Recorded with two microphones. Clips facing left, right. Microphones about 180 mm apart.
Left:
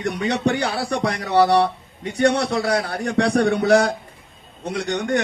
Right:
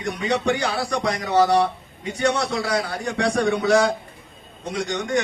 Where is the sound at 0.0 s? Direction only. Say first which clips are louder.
Left 2 dB; 65° left (ahead or behind).